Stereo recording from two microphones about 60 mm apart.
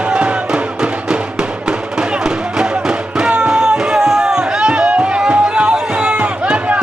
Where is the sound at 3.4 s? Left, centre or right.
Centre.